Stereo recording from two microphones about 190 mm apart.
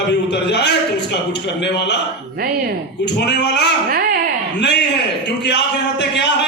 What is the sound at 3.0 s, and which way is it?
Speech, 65° left (ahead or behind).